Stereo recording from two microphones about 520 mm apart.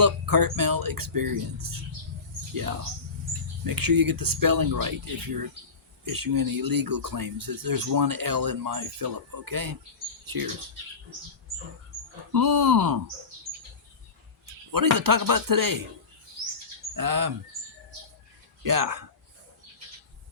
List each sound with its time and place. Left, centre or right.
0.0 s speech: right
3.6 s speech: right
12.3 s speech: right
14.7 s speech: right
16.9 s speech: right
18.6 s speech: right